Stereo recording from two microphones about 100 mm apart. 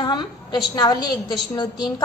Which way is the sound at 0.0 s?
45° left (ahead or behind).